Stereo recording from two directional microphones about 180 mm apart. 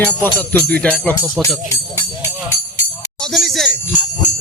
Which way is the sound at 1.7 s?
15° left (ahead or behind).